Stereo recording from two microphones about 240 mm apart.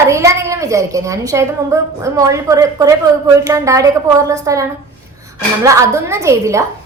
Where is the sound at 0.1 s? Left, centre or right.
Centre.